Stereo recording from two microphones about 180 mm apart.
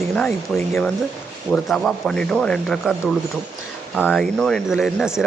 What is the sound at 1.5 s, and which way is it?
Speech, centre (ahead or behind).